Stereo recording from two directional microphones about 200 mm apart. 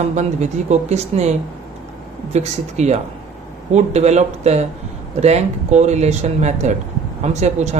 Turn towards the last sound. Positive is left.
turn(degrees=-35)  # may be behind; listen again after turning